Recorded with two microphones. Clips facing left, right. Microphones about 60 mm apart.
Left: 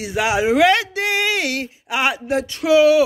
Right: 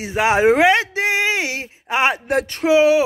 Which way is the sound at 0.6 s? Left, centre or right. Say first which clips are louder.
Even; right.